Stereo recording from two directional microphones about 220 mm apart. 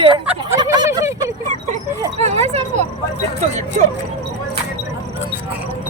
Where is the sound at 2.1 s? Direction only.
30° right (ahead or behind).